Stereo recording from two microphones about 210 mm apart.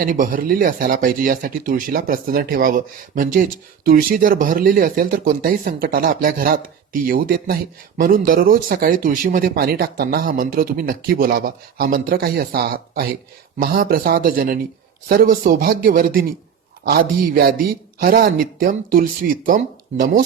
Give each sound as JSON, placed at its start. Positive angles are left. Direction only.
{"t": 0.0, "sound": "speech", "side_deg": -40}